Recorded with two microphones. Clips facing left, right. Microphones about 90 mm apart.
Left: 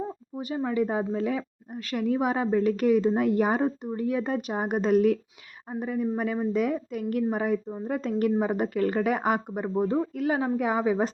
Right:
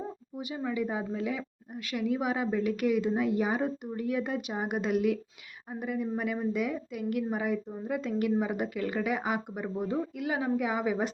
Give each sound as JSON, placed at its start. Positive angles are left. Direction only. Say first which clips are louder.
{"t": 0.3, "sound": "a woman's voice", "louder": "left 6 dB", "side_deg": 40}
{"t": 3.2, "sound": "speech", "louder": "left 5 dB", "side_deg": 50}
{"t": 3.6, "sound": "a woman's voice", "louder": "left 5 dB", "side_deg": 30}